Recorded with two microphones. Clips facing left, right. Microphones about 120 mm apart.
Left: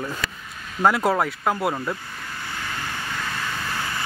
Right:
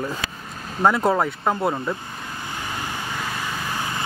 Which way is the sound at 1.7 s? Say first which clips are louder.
Right 2 dB; 20° right (ahead or behind).